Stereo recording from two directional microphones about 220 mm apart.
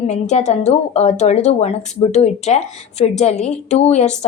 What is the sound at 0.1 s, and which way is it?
A woman's voice, 30° left (ahead or behind).